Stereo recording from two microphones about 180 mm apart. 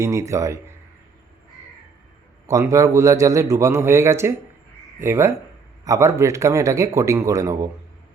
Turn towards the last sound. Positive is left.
turn(degrees=-15)  # may be behind; listen again after turning